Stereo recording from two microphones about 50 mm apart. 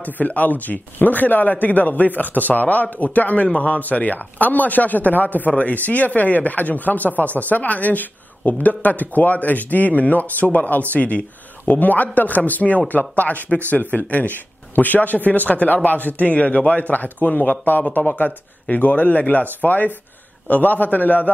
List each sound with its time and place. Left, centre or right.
0.0 s speech: left